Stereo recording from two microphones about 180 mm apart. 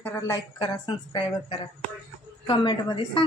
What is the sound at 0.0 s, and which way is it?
Speech, 20° left (ahead or behind).